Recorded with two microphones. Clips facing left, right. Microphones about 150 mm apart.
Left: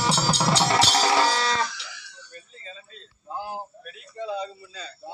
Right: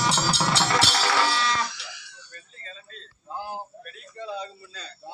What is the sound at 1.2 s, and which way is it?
Livestock, 40° left (ahead or behind).